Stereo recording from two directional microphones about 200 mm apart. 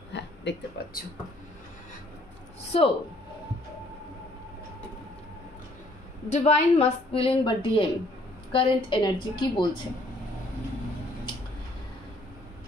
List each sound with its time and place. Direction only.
0.1 s a sound: 60° left (ahead or behind)
2.7 s a woman's voice: 30° left (ahead or behind)
6.2 s a woman's voice: 35° left (ahead or behind)